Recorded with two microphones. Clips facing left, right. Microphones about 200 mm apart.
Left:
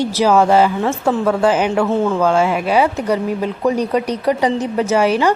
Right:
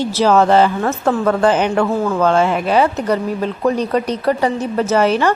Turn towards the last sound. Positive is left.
turn(degrees=10)  # may be behind; listen again after turning